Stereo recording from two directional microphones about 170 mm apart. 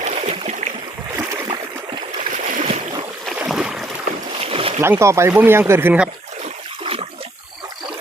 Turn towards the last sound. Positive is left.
turn(degrees=-35)  # may be behind; listen again after turning